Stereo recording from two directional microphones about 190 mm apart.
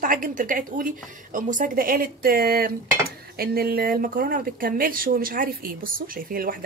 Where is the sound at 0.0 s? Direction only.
45° right (ahead or behind).